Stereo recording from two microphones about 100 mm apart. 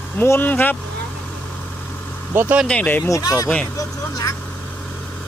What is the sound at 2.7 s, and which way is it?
Speech, 15° left (ahead or behind).